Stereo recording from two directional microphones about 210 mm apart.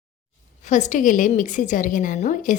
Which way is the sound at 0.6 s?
35° left (ahead or behind).